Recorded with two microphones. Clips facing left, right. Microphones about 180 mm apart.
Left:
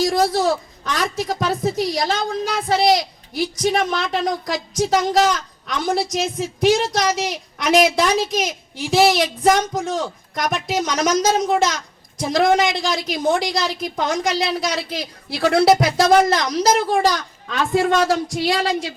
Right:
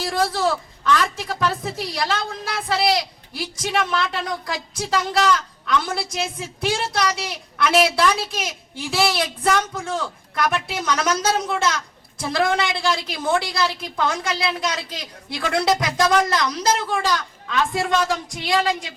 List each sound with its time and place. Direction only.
0.0 s a woman's voice: 40° left (ahead or behind)